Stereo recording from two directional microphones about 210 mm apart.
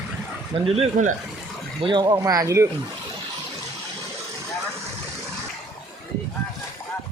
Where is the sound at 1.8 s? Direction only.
20° right (ahead or behind).